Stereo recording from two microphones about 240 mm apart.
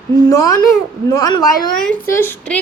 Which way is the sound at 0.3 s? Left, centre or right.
Centre.